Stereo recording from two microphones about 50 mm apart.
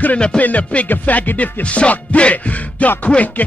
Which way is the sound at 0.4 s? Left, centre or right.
Left.